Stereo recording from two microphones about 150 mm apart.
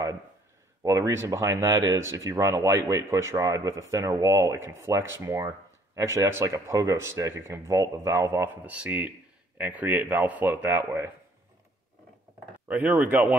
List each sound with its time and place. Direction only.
0.8 s speech: 20° right (ahead or behind)
12.6 s speech: 10° right (ahead or behind)